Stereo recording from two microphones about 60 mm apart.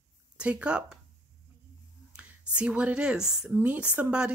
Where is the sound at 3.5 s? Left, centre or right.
Right.